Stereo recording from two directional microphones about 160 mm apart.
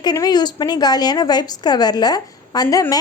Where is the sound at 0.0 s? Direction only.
25° left (ahead or behind).